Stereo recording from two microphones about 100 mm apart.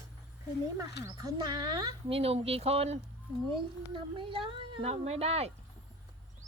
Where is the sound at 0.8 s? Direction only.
40° right (ahead or behind).